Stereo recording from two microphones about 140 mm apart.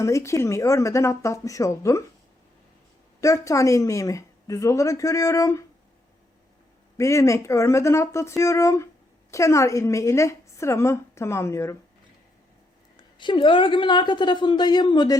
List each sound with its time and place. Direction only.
0.0 s a woman's voice: 20° left (ahead or behind)
3.2 s a woman's voice: 25° left (ahead or behind)
6.9 s a woman's voice: 20° left (ahead or behind)
13.0 s a woman's voice: 35° left (ahead or behind)